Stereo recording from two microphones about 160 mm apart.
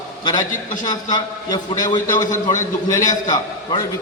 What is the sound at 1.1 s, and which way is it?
A man's voice, 25° left (ahead or behind).